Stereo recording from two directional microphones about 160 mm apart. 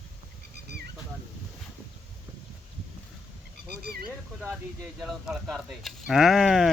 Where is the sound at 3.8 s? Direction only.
75° right (ahead or behind).